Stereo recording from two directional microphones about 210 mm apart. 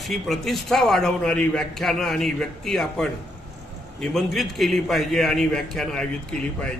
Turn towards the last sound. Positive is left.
turn(degrees=5)  # may be behind; listen again after turning